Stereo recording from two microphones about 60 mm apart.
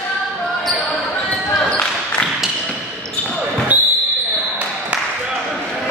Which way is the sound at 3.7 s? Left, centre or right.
Right.